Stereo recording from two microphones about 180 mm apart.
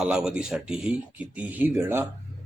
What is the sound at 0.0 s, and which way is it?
Speech, 5° right (ahead or behind).